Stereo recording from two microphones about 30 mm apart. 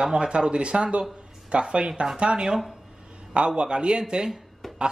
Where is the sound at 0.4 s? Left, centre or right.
Right.